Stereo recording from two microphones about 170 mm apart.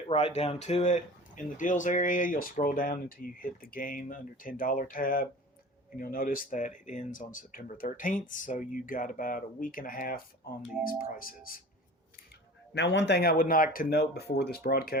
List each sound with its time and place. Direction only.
0.1 s speech: 35° left (ahead or behind); by 11.6 s 55° left (ahead or behind)
12.7 s speech: 90° left; by 14.9 s 60° left (ahead or behind)